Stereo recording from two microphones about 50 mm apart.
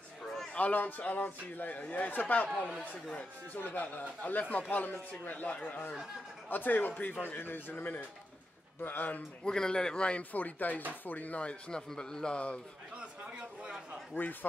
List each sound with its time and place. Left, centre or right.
0.2 s a sound: centre
0.5 s a man's voice: left
6.5 s a man's voice: left
7.3 s a man's voice: left
9.4 s a man's voice: centre
10.3 s a man's voice: left
12.9 s a sound: right
14.2 s a man's voice: left